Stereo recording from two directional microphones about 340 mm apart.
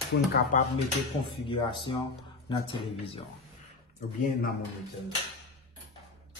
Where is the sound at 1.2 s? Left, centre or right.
Centre.